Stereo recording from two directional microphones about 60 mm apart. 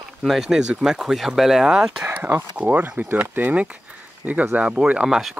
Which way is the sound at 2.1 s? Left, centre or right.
Right.